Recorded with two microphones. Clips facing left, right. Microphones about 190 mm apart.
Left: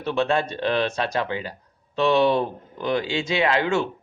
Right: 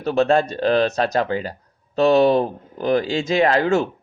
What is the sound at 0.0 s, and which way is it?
Speech, 40° right (ahead or behind).